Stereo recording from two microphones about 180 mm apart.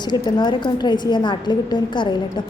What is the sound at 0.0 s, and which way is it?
A woman's voice, 25° left (ahead or behind).